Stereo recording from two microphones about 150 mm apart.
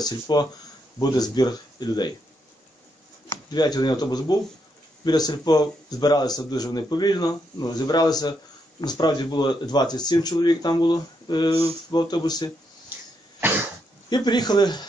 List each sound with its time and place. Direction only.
0.0 s a man's voice: 25° left (ahead or behind)
3.3 s a man's voice: 30° left (ahead or behind)
13.4 s cough: 15° right (ahead or behind)
14.0 s a man's voice: 30° left (ahead or behind)